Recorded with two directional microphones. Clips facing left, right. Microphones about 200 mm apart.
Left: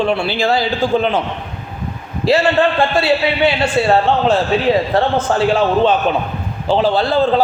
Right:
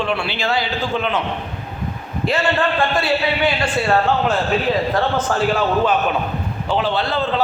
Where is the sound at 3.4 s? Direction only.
30° left (ahead or behind).